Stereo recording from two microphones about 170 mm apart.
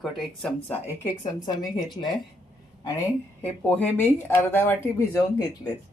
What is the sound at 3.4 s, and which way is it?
Speech, 10° left (ahead or behind).